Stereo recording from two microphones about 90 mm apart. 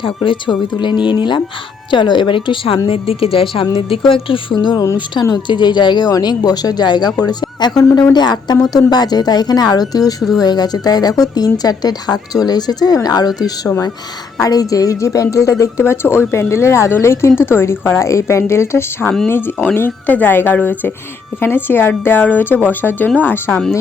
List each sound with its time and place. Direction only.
0.0 s speech: 65° left (ahead or behind)
2.8 s a woman's voice: 90° left
3.8 s speech: 90° left
4.5 s a woman's voice: 55° left (ahead or behind)
10.2 s speech: centre (ahead or behind)
10.4 s a woman's voice: 50° left (ahead or behind); by 19.0 s 30° left (ahead or behind)
19.0 s speech: 5° left (ahead or behind)
19.3 s a woman's voice: 20° left (ahead or behind)